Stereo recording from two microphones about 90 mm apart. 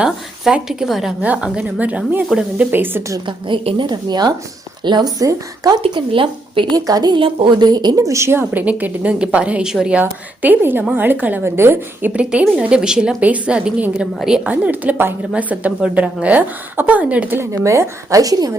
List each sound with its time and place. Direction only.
0.0 s speech: 10° right (ahead or behind)
1.2 s a woman's voice: 15° right (ahead or behind)
3.2 s a woman's voice: 65° right (ahead or behind)
3.8 s speech: 50° right (ahead or behind)
6.1 s a woman's voice: 75° right (ahead or behind)
6.7 s speech: 45° right (ahead or behind)
7.2 s a woman's voice: 75° right (ahead or behind)
7.7 s speech: 50° right (ahead or behind)
8.0 s a woman's voice: 30° right (ahead or behind); by 10.0 s 5° right (ahead or behind)
10.0 s a woman's voice: 20° right (ahead or behind)
12.1 s a woman's voice: 10° right (ahead or behind)
17.5 s speech: 35° right (ahead or behind)